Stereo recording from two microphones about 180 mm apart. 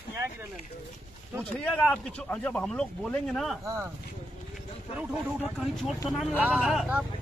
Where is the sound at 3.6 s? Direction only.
15° right (ahead or behind).